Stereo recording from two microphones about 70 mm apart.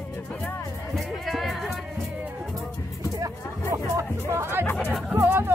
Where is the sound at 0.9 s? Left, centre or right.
Centre.